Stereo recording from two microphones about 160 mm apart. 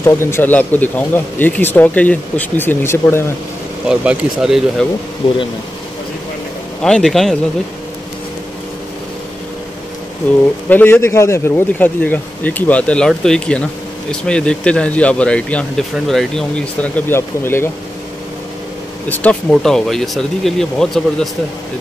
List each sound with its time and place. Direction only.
0.0 s speech: 15° left (ahead or behind)
3.9 s speech: 5° right (ahead or behind)
5.2 s speech: 30° left (ahead or behind)
6.8 s speech: 5° left (ahead or behind)
10.7 s speech: 15° left (ahead or behind)
19.0 s speech: 5° left (ahead or behind)